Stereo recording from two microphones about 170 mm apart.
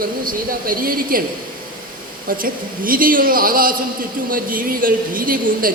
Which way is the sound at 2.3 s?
55° right (ahead or behind).